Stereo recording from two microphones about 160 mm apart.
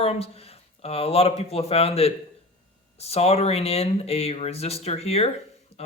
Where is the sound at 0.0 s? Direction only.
40° left (ahead or behind).